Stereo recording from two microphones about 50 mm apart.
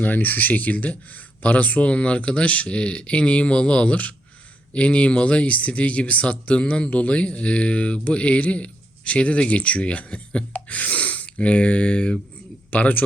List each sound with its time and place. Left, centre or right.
0.0 s speech: left
12.7 s speech: left